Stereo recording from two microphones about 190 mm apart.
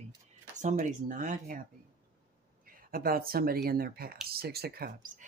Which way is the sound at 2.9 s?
50° right (ahead or behind).